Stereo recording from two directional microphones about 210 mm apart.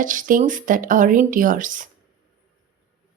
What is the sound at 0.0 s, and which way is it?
Speech, 40° right (ahead or behind).